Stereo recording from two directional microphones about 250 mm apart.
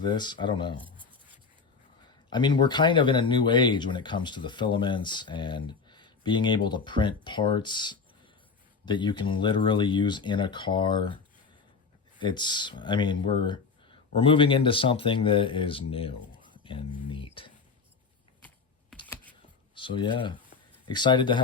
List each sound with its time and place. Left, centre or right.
0.0 s speech: centre
2.3 s speech: centre
12.2 s speech: centre
19.7 s speech: centre